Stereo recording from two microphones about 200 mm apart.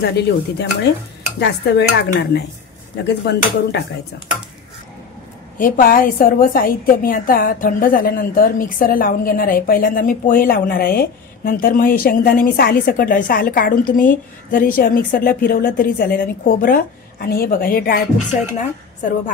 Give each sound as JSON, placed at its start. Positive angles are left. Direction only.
{"t": 0.0, "sound": "speech", "side_deg": 55}
{"t": 5.6, "sound": "a woman's voice", "side_deg": 45}